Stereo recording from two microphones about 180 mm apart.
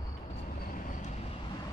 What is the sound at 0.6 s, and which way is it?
Vehicle, 40° left (ahead or behind).